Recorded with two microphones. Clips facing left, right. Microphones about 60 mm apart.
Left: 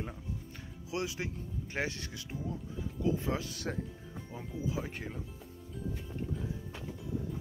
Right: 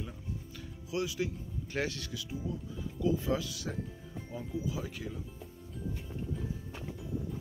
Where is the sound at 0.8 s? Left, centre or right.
Left.